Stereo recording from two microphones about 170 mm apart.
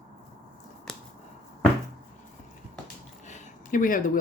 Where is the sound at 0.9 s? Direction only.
Centre (ahead or behind).